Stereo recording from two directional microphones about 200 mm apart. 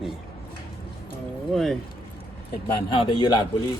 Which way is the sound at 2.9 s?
25° left (ahead or behind).